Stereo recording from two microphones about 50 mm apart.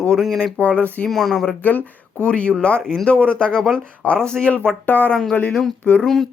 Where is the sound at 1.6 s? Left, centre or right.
Left.